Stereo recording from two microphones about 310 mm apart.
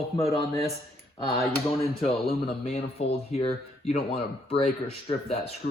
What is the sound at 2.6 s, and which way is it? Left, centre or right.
Speech, centre.